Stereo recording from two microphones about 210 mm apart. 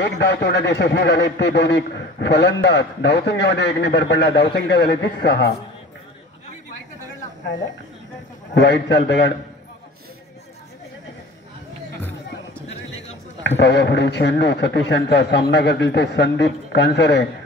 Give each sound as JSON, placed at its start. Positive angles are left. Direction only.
{"t": 0.0, "sound": "a man's voice", "side_deg": 55}
{"t": 8.5, "sound": "a man's voice", "side_deg": 55}
{"t": 13.6, "sound": "a man's voice", "side_deg": 55}